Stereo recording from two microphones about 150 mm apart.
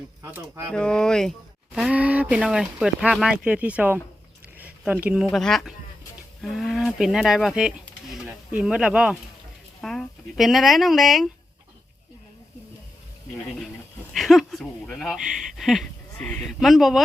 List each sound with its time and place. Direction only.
0.2 s speech: 15° right (ahead or behind)
0.7 s speech: 5° left (ahead or behind)
1.7 s speech: 5° right (ahead or behind)
4.5 s a sound: 10° right (ahead or behind)
5.3 s speech: centre (ahead or behind)
14.1 s speech: centre (ahead or behind)